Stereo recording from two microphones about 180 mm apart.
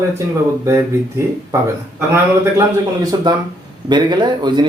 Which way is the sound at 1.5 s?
15° right (ahead or behind).